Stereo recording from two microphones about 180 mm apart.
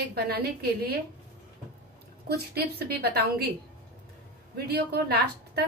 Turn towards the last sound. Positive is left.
turn(degrees=-65)  # may be behind; listen again after turning